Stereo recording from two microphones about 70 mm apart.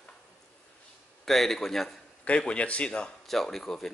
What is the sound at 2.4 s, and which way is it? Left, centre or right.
Speech, centre.